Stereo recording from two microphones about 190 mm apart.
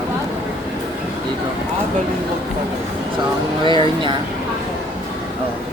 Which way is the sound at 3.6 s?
25° right (ahead or behind).